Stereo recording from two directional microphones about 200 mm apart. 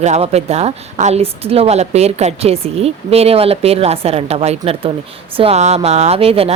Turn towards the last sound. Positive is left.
turn(degrees=-30)  # may be behind; listen again after turning